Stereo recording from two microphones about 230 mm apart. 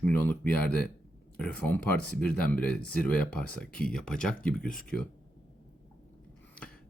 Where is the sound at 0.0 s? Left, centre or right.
Centre.